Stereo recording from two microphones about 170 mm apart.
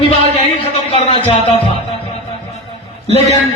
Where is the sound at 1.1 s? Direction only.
30° left (ahead or behind).